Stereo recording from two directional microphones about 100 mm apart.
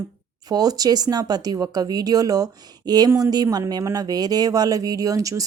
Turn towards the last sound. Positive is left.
turn(degrees=-35)  # may be behind; listen again after turning